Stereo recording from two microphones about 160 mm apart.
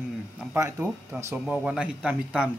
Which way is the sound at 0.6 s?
20° right (ahead or behind).